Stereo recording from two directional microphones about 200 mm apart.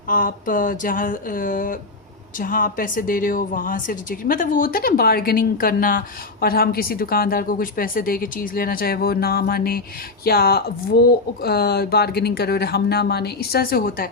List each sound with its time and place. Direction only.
0.1 s a woman's voice: 45° left (ahead or behind)